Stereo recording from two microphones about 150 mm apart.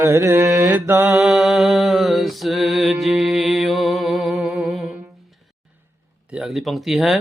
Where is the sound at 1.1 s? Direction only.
Centre (ahead or behind).